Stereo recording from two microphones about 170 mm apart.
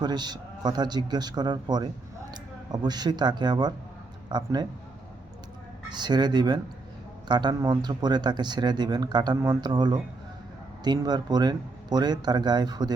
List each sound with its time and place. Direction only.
0.0 s speech: 25° right (ahead or behind)
5.9 s speech: 25° right (ahead or behind)